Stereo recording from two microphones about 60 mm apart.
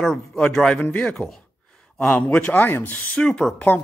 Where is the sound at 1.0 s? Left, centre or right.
Centre.